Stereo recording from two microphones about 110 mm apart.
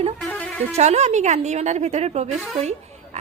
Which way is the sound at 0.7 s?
85° right.